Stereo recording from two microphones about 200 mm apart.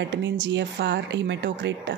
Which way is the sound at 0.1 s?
65° right (ahead or behind).